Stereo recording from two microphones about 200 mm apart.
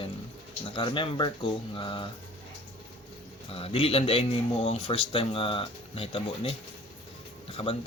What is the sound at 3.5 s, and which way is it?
Speech, 30° left (ahead or behind).